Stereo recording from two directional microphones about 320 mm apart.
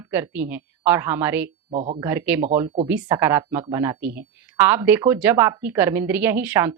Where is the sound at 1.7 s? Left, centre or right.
Right.